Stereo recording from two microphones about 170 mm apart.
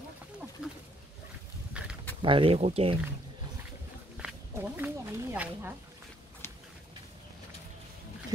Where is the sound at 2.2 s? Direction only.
30° right (ahead or behind).